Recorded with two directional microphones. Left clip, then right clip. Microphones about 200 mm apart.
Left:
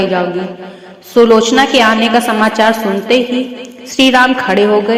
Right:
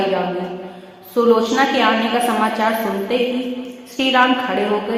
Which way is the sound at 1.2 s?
35° left (ahead or behind).